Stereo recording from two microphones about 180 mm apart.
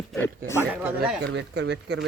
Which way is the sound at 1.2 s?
75° right (ahead or behind).